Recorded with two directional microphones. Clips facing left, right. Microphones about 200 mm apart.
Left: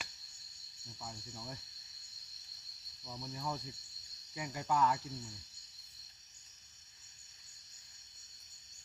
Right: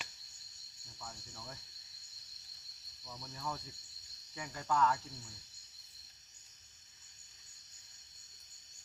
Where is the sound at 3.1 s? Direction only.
15° left (ahead or behind).